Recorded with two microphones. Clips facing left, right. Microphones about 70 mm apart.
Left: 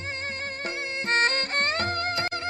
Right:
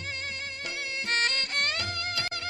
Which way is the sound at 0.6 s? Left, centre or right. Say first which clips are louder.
Left 3 dB; left.